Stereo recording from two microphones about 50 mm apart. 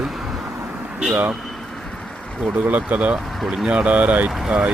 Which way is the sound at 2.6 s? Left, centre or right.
Right.